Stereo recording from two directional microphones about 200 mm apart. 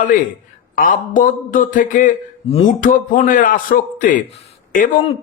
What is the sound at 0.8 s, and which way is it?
A man's voice, 45° left (ahead or behind).